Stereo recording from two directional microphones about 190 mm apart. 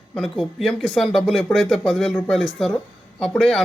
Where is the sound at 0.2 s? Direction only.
Centre (ahead or behind).